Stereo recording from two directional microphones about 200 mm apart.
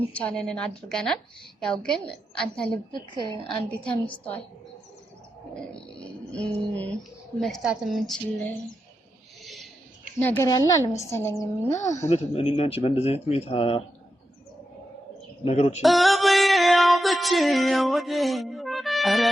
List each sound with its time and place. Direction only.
0.1 s a woman's voice: 5° left (ahead or behind)
3.8 s a woman's voice: 5° left (ahead or behind)
6.0 s a woman's voice: 5° left (ahead or behind)
9.4 s owl: centre (ahead or behind)
10.2 s a woman's voice: 10° left (ahead or behind)
11.9 s speech: 35° left (ahead or behind)
15.4 s speech: 30° left (ahead or behind)
15.8 s music: centre (ahead or behind)